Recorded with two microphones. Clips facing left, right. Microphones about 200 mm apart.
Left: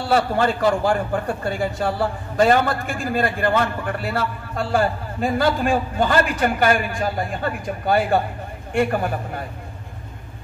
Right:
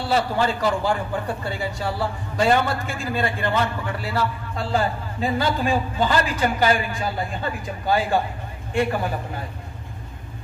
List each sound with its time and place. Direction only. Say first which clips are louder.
0.1 s a man's voice: left 3 dB; 55° left (ahead or behind)